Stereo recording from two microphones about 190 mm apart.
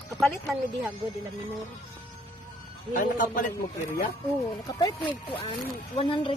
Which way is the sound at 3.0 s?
45° left (ahead or behind).